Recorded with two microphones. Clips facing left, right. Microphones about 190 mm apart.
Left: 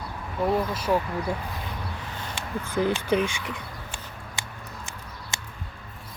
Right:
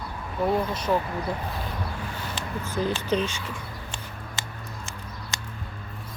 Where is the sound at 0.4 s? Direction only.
5° left (ahead or behind).